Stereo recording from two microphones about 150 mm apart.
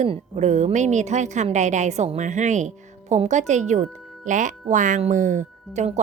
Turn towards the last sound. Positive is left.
turn(degrees=-50)  # may be behind; listen again after turning